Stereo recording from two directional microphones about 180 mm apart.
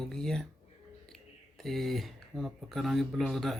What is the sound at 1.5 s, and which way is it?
Speech, centre (ahead or behind).